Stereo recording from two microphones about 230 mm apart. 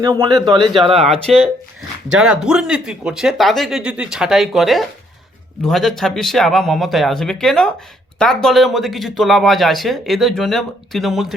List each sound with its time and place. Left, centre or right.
0.0 s speech: centre
1.3 s speech: centre